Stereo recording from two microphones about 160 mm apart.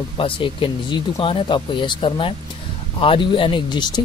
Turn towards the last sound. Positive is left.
turn(degrees=30)  # may be behind; listen again after turning